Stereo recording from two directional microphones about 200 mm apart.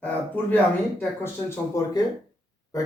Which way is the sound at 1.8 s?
15° left (ahead or behind).